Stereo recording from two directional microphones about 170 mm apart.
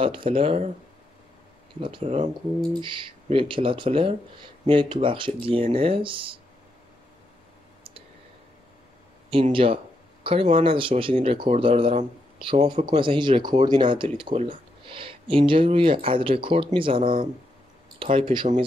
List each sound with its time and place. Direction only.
0.0 s speech: 30° right (ahead or behind)
1.8 s speech: 30° right (ahead or behind)
9.3 s speech: 30° right (ahead or behind)